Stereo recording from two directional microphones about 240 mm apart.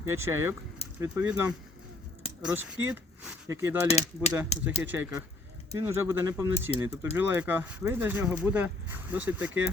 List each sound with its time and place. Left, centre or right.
0.0 s speech: right
0.3 s speech: centre
3.8 s speech: left
4.8 s speech: centre